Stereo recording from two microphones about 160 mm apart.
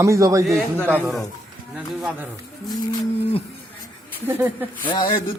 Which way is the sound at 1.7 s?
10° right (ahead or behind).